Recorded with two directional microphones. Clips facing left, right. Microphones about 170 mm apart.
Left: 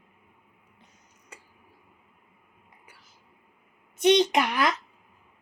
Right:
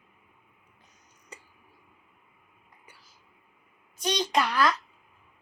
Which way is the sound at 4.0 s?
25° left (ahead or behind).